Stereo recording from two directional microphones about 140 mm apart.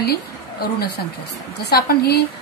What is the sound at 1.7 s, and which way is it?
Speech, 90° left.